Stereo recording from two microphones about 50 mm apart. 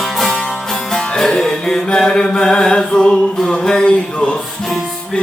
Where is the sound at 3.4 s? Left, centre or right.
Centre.